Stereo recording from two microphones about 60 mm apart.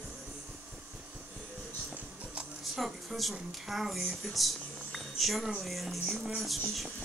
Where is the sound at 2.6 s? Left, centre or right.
Centre.